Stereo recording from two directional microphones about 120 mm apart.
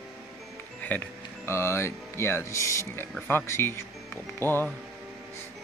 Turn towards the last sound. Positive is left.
turn(degrees=20)  # may be behind; listen again after turning